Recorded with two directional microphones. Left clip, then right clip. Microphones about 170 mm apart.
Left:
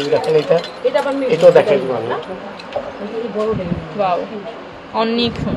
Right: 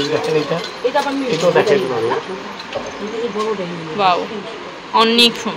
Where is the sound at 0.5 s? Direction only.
45° left (ahead or behind).